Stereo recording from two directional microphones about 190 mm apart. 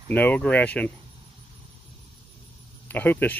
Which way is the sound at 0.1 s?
10° left (ahead or behind).